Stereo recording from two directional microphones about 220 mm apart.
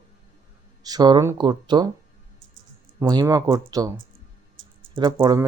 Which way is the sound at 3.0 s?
15° right (ahead or behind).